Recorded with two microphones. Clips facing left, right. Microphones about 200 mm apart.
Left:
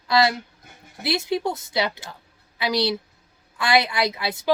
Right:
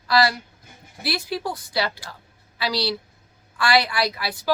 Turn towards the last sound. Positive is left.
turn(degrees=20)  # may be behind; listen again after turning